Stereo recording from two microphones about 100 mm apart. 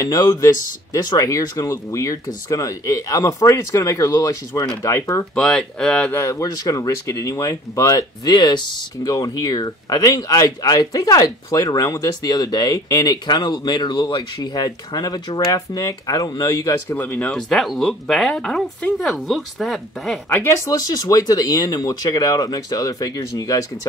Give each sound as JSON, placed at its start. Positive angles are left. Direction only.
{"t": 0.0, "sound": "speech", "side_deg": 30}
{"t": 5.3, "sound": "speech", "side_deg": 10}
{"t": 6.1, "sound": "speech", "side_deg": 30}
{"t": 8.3, "sound": "speech", "side_deg": 50}
{"t": 16.9, "sound": "speech", "side_deg": 20}
{"t": 17.4, "sound": "speech", "side_deg": 5}
{"t": 20.6, "sound": "speech", "side_deg": 40}